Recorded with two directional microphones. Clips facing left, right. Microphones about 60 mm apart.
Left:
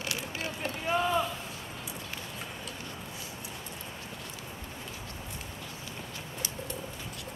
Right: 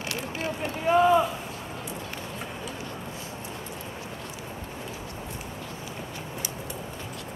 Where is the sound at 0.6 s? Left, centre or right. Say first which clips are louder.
Right 9 dB; centre.